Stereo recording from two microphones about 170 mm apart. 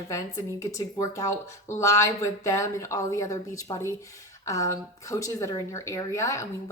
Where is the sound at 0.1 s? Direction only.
20° left (ahead or behind).